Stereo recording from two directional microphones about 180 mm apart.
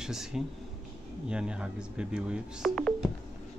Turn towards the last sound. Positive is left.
turn(degrees=0)  # may be behind; listen again after turning